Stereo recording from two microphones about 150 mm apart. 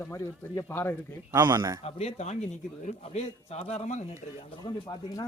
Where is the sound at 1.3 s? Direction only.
25° right (ahead or behind).